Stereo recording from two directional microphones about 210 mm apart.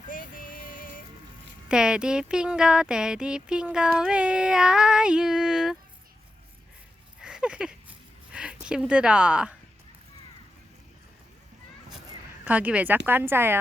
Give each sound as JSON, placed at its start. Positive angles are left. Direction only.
{"t": 0.1, "sound": "music", "side_deg": 40}
{"t": 1.6, "sound": "speech", "side_deg": -5}
{"t": 7.2, "sound": "a sound", "side_deg": -5}
{"t": 8.6, "sound": "speech", "side_deg": -5}
{"t": 12.5, "sound": "a woman's voice", "side_deg": -5}